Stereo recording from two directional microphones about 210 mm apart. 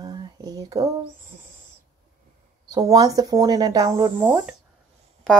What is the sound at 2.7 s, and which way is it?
Speech, 15° right (ahead or behind).